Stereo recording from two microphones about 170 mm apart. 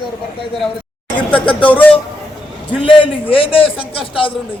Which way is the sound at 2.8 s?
30° left (ahead or behind).